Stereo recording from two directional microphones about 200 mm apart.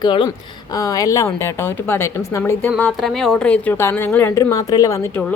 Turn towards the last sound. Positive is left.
turn(degrees=15)  # may be behind; listen again after turning